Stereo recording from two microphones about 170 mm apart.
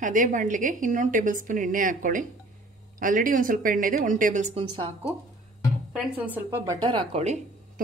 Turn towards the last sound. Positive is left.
turn(degrees=-40)  # may be behind; listen again after turning